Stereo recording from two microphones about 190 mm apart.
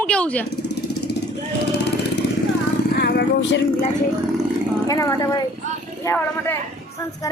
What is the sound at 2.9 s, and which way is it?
Vehicle, 60° left (ahead or behind).